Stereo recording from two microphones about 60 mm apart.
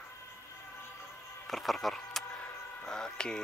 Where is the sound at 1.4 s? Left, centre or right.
Centre.